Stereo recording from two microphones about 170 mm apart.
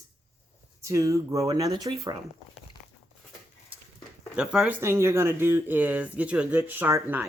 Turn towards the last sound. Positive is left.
turn(degrees=-15)  # may be behind; listen again after turning